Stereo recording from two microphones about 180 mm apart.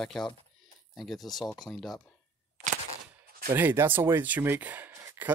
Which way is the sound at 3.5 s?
10° right (ahead or behind).